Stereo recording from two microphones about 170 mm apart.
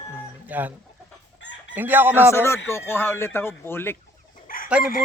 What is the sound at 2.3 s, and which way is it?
Speech, 15° left (ahead or behind).